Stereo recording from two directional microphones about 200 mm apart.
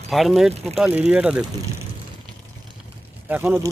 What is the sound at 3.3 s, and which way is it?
Speech, 10° right (ahead or behind).